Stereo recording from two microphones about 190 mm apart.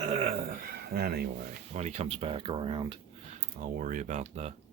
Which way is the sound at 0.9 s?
55° right (ahead or behind).